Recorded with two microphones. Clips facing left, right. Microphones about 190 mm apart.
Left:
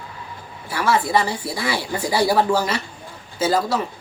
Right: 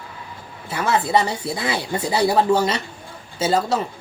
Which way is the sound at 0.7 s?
25° right (ahead or behind).